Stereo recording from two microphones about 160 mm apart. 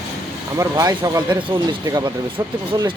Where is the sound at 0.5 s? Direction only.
20° right (ahead or behind).